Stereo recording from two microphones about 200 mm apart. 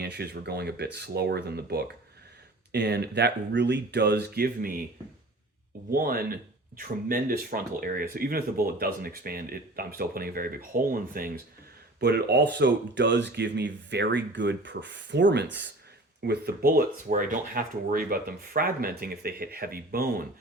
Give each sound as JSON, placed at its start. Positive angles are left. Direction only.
{"t": 0.0, "sound": "speech", "side_deg": -55}
{"t": 5.9, "sound": "speech", "side_deg": -45}